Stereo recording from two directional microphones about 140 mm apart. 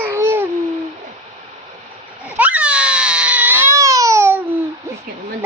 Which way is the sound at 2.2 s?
10° right (ahead or behind).